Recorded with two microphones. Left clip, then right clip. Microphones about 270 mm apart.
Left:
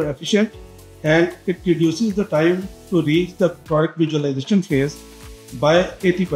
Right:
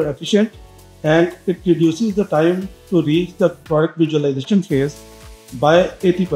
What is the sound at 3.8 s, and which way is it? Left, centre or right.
Speech, left.